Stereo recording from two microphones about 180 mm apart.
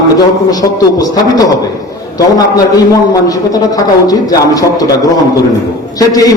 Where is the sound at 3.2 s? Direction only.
20° left (ahead or behind).